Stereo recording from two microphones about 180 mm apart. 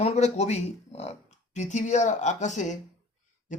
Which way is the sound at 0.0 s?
35° left (ahead or behind).